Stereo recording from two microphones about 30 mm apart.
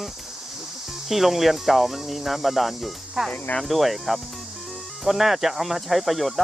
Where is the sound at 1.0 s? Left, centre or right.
Centre.